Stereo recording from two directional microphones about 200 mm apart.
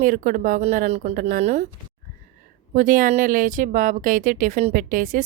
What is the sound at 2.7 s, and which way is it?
Speech, 40° right (ahead or behind).